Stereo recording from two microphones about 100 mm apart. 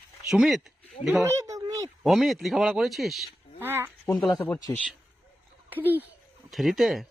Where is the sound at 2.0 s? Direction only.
Centre (ahead or behind).